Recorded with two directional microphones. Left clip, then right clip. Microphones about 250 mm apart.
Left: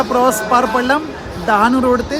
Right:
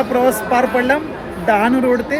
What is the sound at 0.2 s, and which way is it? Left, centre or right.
A man's voice, centre.